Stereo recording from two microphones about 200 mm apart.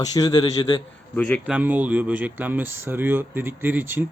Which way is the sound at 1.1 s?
5° left (ahead or behind).